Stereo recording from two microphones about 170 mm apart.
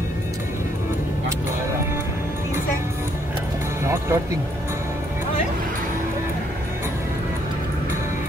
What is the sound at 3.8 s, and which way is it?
Music, 15° right (ahead or behind).